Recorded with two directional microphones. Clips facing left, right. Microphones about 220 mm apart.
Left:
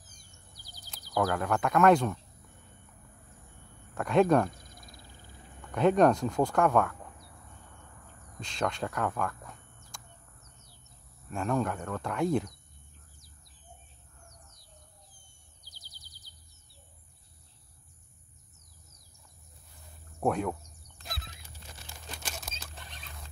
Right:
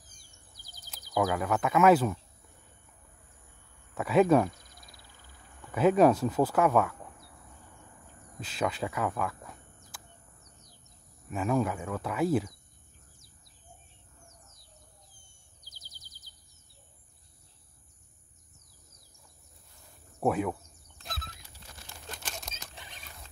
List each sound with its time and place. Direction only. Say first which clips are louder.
0.6 s bird: left 2 dB; 45° right (ahead or behind)
0.9 s speech: right 1 dB; 5° right (ahead or behind)
3.9 s speech: right 1 dB; 5° right (ahead or behind)
4.6 s a sound: left 4 dB; 50° left (ahead or behind)
5.2 s a sound: left 5 dB; 25° left (ahead or behind)
5.7 s speech: right 1 dB; 5° right (ahead or behind)
8.4 s speech: right 1 dB; 5° right (ahead or behind)
10.4 s bird: right 1 dB; 15° right (ahead or behind)
11.2 s speech: right 2 dB; 5° right (ahead or behind)
15.6 s bird vocalization: right 1 dB; 45° right (ahead or behind)
20.2 s speech: right 1 dB; 5° right (ahead or behind)
22.1 s a sound: even; 10° left (ahead or behind)